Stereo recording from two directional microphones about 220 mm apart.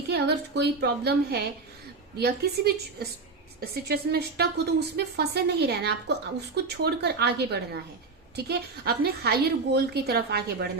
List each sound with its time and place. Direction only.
0.1 s a woman's voice: 50° right (ahead or behind)